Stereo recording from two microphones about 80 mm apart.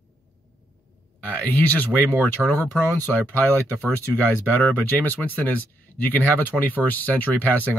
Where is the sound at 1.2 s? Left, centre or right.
Centre.